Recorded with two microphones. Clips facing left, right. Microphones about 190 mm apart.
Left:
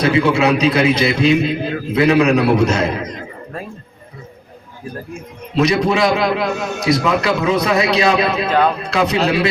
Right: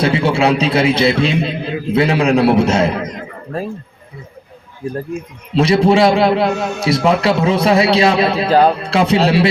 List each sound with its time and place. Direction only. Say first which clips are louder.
0.0 s a man's voice: even; 30° right (ahead or behind)
4.8 s a man's voice: right 7 dB; 30° right (ahead or behind)